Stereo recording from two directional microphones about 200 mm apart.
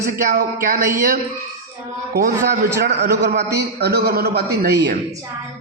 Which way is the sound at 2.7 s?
55° right (ahead or behind).